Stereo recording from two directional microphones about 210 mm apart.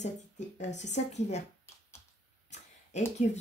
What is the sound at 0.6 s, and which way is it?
Speech, 35° left (ahead or behind).